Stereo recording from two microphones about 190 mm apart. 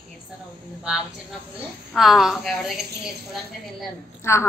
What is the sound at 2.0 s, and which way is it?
Speech, centre (ahead or behind).